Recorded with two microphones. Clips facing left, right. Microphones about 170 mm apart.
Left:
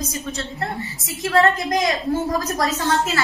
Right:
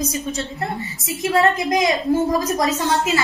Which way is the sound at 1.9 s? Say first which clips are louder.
Right 3 dB; 20° right (ahead or behind).